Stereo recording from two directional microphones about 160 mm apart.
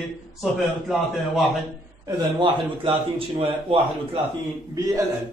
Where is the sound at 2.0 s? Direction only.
30° right (ahead or behind).